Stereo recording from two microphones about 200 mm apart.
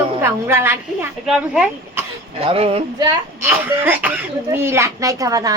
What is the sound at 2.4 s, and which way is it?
A woman's voice, 30° right (ahead or behind).